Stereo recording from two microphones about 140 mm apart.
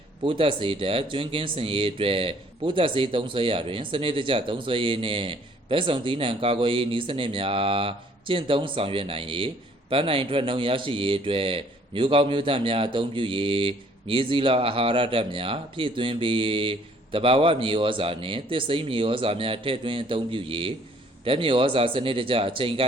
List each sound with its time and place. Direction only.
0.2 s speech: 40° right (ahead or behind)